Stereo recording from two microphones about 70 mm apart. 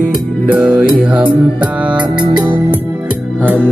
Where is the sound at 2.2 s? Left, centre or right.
Right.